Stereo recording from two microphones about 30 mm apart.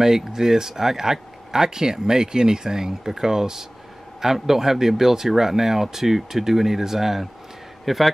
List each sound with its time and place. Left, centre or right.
0.0 s speech: centre